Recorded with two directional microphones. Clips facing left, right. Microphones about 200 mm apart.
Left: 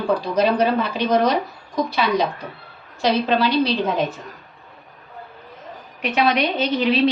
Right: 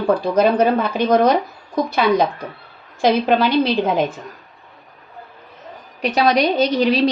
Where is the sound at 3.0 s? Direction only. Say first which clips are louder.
Right 3 dB; 50° right (ahead or behind).